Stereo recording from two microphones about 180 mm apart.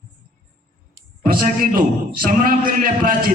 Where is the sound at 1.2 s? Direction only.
50° right (ahead or behind).